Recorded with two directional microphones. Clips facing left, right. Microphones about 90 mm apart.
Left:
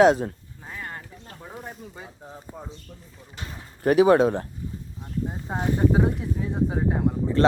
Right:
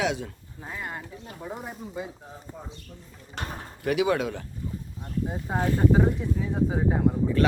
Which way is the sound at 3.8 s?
40° left (ahead or behind).